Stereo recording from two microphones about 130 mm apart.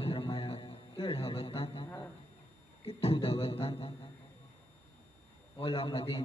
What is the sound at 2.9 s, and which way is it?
A man's voice, 45° left (ahead or behind).